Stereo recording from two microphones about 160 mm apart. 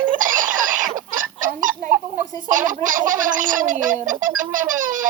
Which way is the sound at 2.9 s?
55° right (ahead or behind).